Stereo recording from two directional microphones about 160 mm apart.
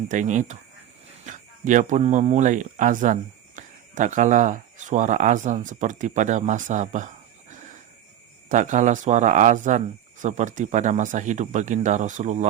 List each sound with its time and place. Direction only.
0.1 s speech: 50° right (ahead or behind)
7.5 s a sound: 50° right (ahead or behind)
8.4 s speech: 50° right (ahead or behind)